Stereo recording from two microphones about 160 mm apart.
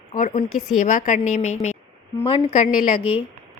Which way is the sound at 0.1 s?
55° left (ahead or behind).